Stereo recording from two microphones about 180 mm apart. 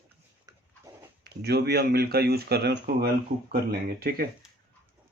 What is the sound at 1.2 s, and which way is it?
Speech, 65° right (ahead or behind).